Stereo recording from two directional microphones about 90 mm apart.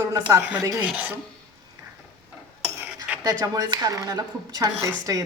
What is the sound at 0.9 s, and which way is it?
Speech, 15° right (ahead or behind).